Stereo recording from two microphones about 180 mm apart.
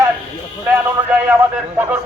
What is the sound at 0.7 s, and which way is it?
Speech, 10° right (ahead or behind).